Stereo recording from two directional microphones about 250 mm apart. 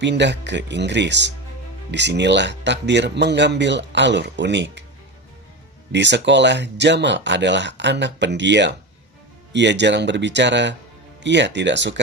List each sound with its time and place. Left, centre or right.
0.0 s speech: right
5.9 s speech: right